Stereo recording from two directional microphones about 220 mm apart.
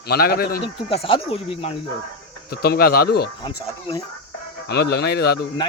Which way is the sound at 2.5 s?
45° left (ahead or behind).